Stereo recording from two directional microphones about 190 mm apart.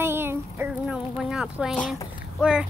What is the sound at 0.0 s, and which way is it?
Music, 10° right (ahead or behind).